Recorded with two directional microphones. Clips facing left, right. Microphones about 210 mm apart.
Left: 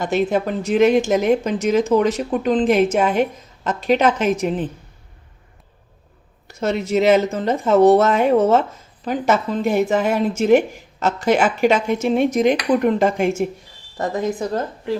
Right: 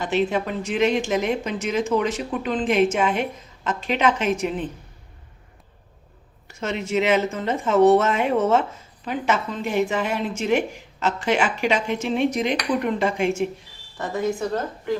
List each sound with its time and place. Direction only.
0.0 s speech: 40° left (ahead or behind)
6.6 s speech: 40° left (ahead or behind)